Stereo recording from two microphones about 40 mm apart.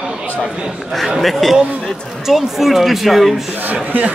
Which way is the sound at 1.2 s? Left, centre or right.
Centre.